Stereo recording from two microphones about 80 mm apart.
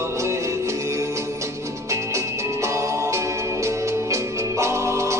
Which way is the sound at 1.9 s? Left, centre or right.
Right.